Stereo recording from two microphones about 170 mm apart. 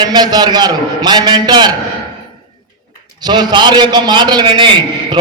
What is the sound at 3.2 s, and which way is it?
A man's voice, 25° right (ahead or behind).